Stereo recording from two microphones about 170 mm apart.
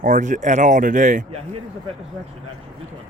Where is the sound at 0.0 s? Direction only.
50° right (ahead or behind).